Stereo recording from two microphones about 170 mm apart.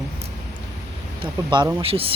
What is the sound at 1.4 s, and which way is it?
Speech, 20° right (ahead or behind).